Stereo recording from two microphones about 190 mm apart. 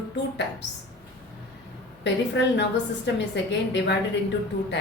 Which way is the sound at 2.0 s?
70° left (ahead or behind).